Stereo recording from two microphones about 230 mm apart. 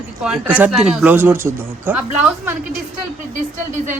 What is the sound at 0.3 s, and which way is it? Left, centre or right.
Speech, centre.